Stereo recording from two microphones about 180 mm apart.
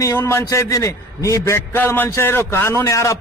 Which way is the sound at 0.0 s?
15° left (ahead or behind).